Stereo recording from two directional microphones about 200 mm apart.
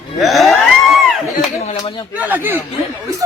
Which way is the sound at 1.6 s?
30° left (ahead or behind).